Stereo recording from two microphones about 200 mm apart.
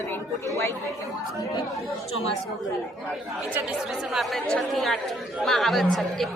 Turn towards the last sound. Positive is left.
turn(degrees=0)  # may be behind; listen again after turning